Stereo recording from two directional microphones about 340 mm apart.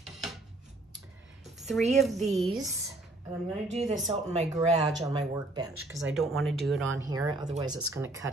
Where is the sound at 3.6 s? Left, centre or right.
Centre.